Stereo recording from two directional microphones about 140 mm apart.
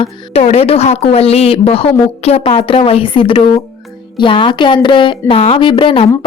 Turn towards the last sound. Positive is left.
turn(degrees=40)  # may be behind; listen again after turning